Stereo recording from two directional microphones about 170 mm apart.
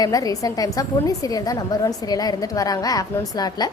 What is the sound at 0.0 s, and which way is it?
A woman's voice, 20° left (ahead or behind).